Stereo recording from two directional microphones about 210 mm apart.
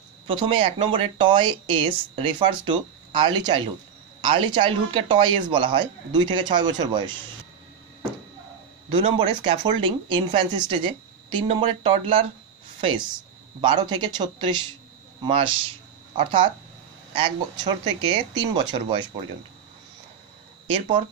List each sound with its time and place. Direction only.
0.3 s speech: 25° right (ahead or behind)
8.8 s speech: 25° right (ahead or behind)
13.6 s speech: 20° right (ahead or behind)
20.6 s speech: 25° right (ahead or behind)